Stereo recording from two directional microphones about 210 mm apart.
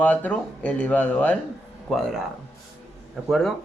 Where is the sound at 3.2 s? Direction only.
Centre (ahead or behind).